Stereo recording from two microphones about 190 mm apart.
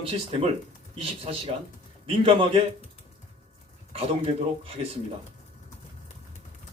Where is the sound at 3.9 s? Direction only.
30° right (ahead or behind).